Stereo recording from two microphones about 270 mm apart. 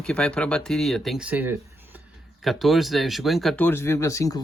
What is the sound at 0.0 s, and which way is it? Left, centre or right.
Speech, centre.